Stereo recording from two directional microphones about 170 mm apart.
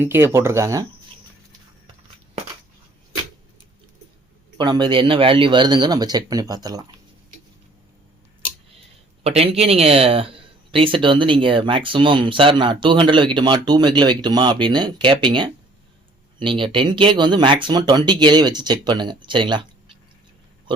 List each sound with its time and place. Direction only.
0.0 s speech: 15° right (ahead or behind)
4.5 s speech: 25° right (ahead or behind)
9.2 s speech: 35° right (ahead or behind)